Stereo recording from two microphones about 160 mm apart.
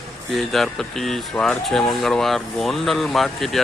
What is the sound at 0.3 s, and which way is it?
Speech, centre (ahead or behind).